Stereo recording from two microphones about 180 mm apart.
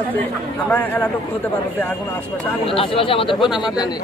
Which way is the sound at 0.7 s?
10° left (ahead or behind).